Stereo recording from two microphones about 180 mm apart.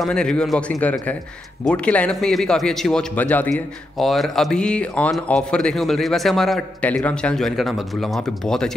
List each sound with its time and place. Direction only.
0.0 s speech: 5° left (ahead or behind)